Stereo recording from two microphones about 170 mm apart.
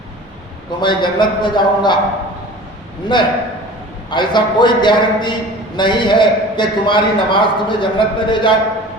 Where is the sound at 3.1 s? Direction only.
25° left (ahead or behind).